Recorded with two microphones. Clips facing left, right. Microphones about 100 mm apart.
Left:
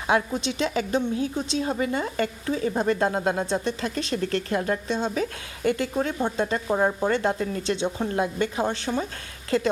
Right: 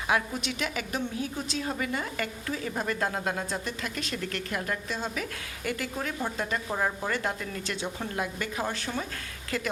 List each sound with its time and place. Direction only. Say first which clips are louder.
0.1 s a woman's voice: left 5 dB; 25° left (ahead or behind)